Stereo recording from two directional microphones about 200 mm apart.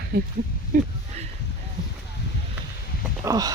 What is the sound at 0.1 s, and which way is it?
Speech, 50° right (ahead or behind).